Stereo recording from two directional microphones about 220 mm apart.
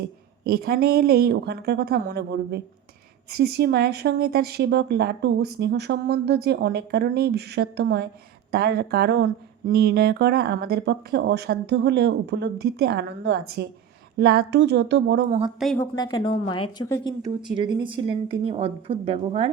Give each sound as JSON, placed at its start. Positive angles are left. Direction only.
{"t": 0.4, "sound": "speech", "side_deg": -45}
{"t": 15.3, "sound": "a woman's voice", "side_deg": -25}
{"t": 15.5, "sound": "a woman's voice", "side_deg": 0}
{"t": 15.8, "sound": "a woman's voice", "side_deg": 15}
{"t": 17.2, "sound": "a woman's voice", "side_deg": -20}